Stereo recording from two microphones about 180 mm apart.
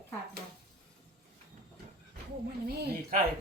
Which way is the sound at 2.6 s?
60° right (ahead or behind).